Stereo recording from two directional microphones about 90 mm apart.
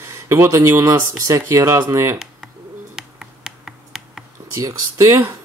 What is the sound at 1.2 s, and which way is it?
Speech, 35° right (ahead or behind).